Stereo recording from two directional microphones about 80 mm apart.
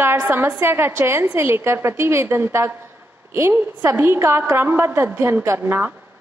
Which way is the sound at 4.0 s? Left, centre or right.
Right.